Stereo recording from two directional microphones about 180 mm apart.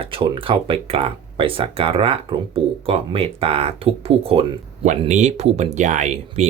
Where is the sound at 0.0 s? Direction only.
30° right (ahead or behind).